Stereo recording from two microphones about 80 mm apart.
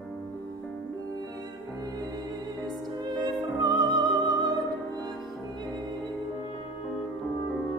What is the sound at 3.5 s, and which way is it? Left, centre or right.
Music, right.